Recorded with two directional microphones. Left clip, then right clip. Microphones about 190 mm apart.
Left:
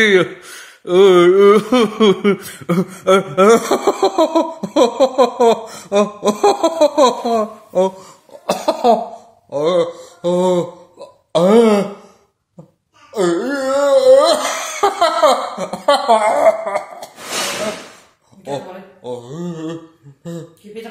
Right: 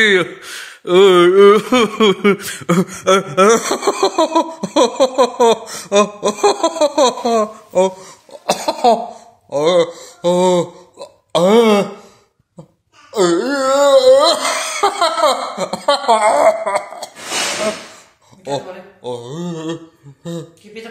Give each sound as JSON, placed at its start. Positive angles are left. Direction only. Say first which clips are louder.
{"t": 0.0, "sound": "speech", "louder": "even", "side_deg": -10}
{"t": 7.7, "sound": "speech", "louder": "right 1 dB", "side_deg": 0}
{"t": 8.3, "sound": "speech", "louder": "even", "side_deg": -15}
{"t": 13.1, "sound": "speech", "louder": "right 2 dB", "side_deg": -30}
{"t": 19.0, "sound": "speech", "louder": "right 2 dB", "side_deg": -30}